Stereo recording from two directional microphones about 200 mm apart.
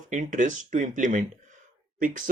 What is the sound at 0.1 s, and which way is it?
Speech, 40° right (ahead or behind).